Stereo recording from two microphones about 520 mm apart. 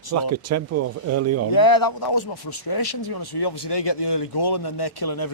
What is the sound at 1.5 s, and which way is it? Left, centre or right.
Speech, left.